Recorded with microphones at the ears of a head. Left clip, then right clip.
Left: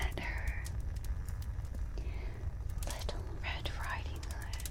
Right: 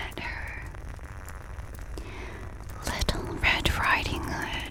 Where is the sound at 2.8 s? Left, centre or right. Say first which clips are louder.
Right 13 dB; right.